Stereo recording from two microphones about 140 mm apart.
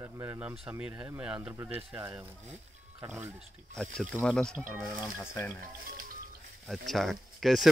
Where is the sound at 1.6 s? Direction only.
10° right (ahead or behind).